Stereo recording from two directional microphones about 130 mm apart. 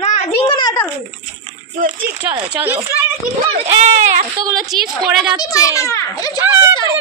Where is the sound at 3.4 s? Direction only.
55° right (ahead or behind).